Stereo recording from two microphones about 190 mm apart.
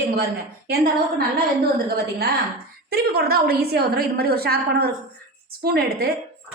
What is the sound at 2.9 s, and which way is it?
A woman's voice, 55° right (ahead or behind).